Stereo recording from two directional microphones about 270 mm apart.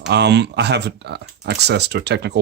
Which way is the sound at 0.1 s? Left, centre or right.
Right.